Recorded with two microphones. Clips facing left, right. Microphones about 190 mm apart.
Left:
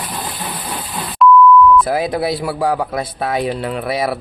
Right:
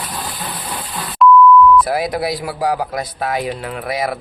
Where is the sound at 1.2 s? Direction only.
Centre (ahead or behind).